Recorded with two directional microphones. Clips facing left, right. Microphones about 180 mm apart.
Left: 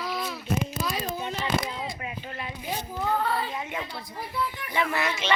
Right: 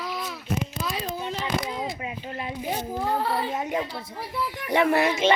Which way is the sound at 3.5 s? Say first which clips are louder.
Right 6 dB; 40° right (ahead or behind).